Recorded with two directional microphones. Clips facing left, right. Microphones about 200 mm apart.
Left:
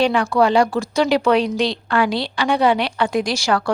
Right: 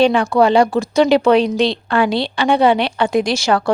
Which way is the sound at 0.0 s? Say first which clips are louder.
Right 4 dB; 25° right (ahead or behind).